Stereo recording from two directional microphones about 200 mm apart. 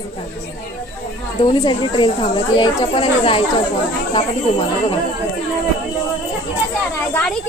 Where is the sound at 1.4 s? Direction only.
25° left (ahead or behind).